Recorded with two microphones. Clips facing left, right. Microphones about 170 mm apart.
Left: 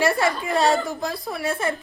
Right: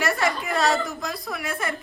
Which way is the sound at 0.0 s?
30° left (ahead or behind).